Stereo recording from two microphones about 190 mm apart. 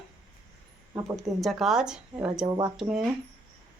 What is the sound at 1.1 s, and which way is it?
Speech, centre (ahead or behind).